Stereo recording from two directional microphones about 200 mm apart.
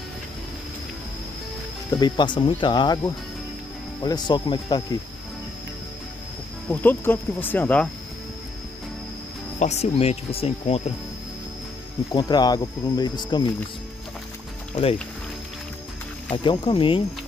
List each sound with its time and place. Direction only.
1.9 s speech: 20° left (ahead or behind)
4.0 s speech: 20° left (ahead or behind)
6.7 s speech: 10° left (ahead or behind)
9.6 s speech: 35° left (ahead or behind)
12.1 s speech: 20° left (ahead or behind)
16.4 s speech: 25° left (ahead or behind)